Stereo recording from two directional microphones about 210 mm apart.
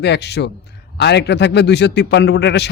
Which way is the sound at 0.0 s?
55° left (ahead or behind).